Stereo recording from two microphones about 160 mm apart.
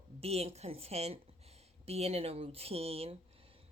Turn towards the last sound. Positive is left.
turn(degrees=-40)  # may be behind; listen again after turning